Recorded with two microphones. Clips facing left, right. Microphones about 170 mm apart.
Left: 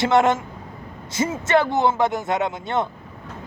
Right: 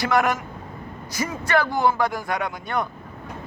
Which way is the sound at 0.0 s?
25° left (ahead or behind).